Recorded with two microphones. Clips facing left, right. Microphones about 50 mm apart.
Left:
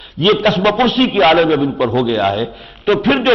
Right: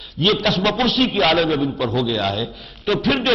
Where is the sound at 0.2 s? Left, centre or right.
Left.